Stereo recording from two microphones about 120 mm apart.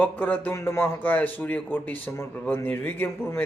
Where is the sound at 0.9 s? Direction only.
15° left (ahead or behind).